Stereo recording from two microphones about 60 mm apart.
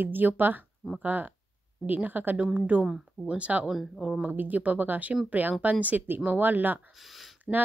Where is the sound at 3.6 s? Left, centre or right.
Centre.